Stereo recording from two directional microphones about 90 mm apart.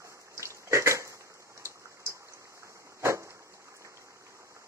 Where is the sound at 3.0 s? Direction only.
35° right (ahead or behind).